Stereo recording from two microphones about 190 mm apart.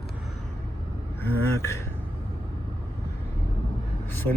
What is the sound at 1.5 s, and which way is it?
Speech, 15° left (ahead or behind).